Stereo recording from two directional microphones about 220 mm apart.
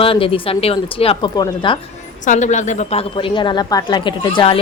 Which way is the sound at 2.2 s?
35° left (ahead or behind).